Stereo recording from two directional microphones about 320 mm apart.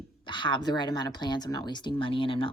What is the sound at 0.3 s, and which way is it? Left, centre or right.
Speech, centre.